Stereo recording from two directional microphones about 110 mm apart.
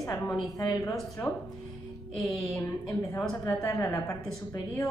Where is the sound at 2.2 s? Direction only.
Centre (ahead or behind).